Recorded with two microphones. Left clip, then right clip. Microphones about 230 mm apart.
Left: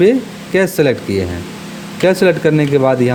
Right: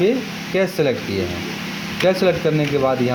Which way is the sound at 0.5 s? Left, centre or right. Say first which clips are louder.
Left 6 dB; left.